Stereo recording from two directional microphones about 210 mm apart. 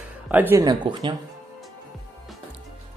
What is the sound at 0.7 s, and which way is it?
Speech, 20° right (ahead or behind).